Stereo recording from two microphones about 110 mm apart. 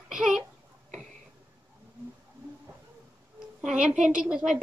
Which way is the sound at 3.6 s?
10° right (ahead or behind).